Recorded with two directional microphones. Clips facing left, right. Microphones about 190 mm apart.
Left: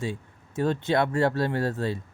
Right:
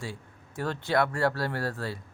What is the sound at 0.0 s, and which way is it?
A man's voice, 20° left (ahead or behind).